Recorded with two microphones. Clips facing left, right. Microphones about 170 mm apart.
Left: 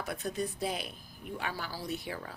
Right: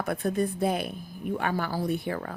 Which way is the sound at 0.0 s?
55° right (ahead or behind).